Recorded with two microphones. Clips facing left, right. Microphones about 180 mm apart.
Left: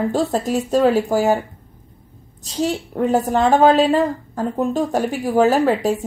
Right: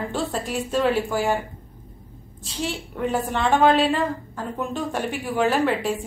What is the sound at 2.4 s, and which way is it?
A woman's voice, 40° left (ahead or behind).